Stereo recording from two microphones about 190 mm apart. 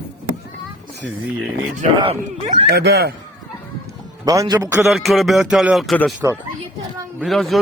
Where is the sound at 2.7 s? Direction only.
60° right (ahead or behind).